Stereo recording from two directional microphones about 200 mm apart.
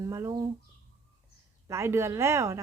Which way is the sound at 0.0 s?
15° right (ahead or behind).